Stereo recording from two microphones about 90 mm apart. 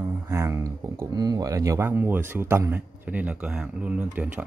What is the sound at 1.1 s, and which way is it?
Speech, 45° right (ahead or behind).